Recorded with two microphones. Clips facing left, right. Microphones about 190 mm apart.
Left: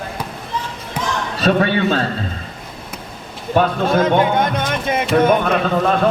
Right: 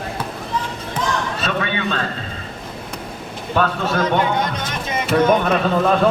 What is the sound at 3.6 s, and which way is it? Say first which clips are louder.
Speech: left 4 dB; 25° left (ahead or behind).